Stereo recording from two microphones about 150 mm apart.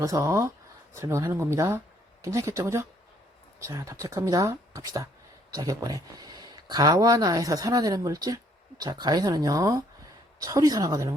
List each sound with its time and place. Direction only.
0.0 s speech: 20° right (ahead or behind)